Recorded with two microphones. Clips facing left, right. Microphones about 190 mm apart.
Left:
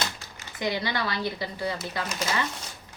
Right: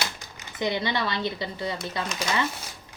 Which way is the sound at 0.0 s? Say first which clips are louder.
Even; 20° right (ahead or behind).